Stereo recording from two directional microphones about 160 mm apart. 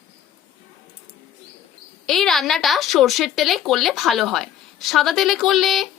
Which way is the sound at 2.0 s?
Centre (ahead or behind).